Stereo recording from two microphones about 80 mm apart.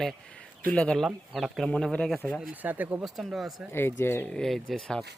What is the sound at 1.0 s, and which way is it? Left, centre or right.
Speech, centre.